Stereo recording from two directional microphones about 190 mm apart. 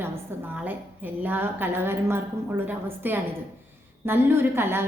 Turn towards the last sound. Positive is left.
turn(degrees=-15)  # may be behind; listen again after turning